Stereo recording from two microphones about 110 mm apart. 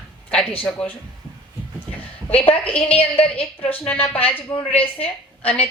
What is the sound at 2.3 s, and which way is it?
A woman's voice, 60° left (ahead or behind).